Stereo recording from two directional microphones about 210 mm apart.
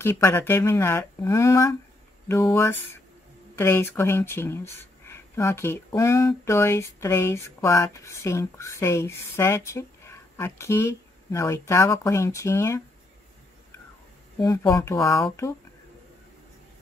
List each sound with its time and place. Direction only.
0.0 s speech: 10° left (ahead or behind)
14.4 s speech: 15° left (ahead or behind)